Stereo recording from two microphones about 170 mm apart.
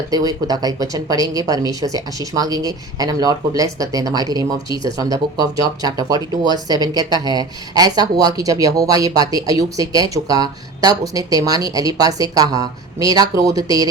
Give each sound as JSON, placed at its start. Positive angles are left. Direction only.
{"t": 0.1, "sound": "speech", "side_deg": -20}